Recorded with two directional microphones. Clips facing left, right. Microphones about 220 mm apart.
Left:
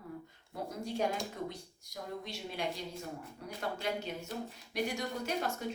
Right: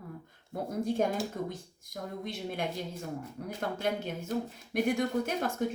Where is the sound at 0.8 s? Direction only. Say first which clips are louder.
Right 5 dB; 50° right (ahead or behind).